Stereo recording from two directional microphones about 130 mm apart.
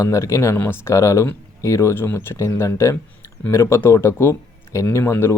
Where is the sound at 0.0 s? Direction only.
25° left (ahead or behind).